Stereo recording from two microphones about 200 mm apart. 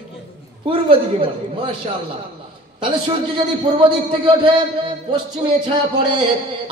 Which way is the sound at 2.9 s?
25° right (ahead or behind).